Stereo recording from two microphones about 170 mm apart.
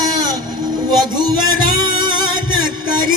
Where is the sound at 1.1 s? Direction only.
25° right (ahead or behind).